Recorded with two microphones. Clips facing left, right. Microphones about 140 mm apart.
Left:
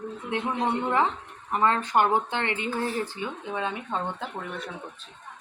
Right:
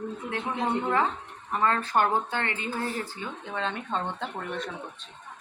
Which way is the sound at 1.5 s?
20° left (ahead or behind).